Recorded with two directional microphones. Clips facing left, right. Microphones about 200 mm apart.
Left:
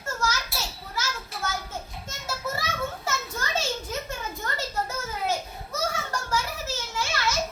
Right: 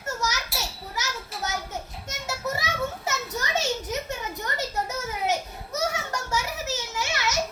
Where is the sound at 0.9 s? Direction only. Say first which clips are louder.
Left 1 dB; 20° right (ahead or behind).